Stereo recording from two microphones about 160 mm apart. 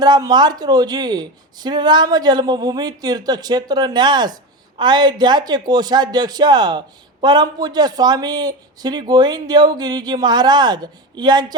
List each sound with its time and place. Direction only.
0.0 s speech: 25° right (ahead or behind)